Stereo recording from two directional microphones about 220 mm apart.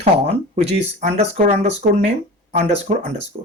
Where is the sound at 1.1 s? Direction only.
35° right (ahead or behind).